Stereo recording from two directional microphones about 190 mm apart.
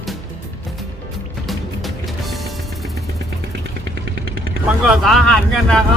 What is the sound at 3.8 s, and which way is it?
Vehicle, 65° right (ahead or behind).